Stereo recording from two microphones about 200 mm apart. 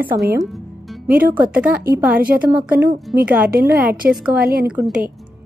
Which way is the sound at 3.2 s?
10° right (ahead or behind).